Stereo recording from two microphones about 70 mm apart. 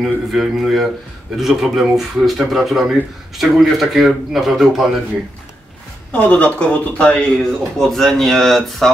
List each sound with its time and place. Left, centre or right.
0.0 s speech: centre
6.1 s speech: left
7.7 s speech: centre